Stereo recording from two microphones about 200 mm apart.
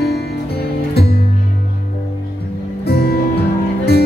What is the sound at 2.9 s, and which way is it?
Music, 50° left (ahead or behind).